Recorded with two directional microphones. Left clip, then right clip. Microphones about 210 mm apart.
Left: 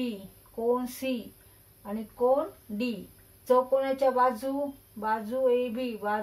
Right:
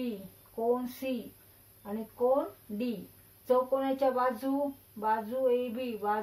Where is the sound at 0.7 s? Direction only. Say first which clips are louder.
Left 3 dB; 5° right (ahead or behind).